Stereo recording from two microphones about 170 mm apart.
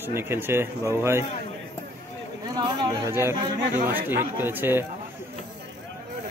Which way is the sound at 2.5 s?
20° right (ahead or behind).